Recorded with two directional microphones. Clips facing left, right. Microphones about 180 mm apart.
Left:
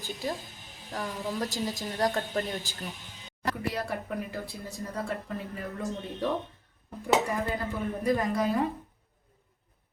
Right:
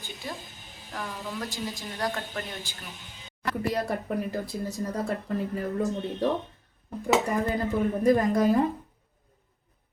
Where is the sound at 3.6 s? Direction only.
40° right (ahead or behind).